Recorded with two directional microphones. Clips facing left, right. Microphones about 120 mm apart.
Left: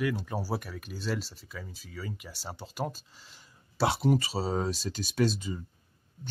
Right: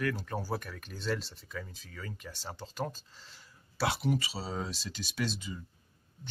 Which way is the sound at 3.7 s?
30° left (ahead or behind).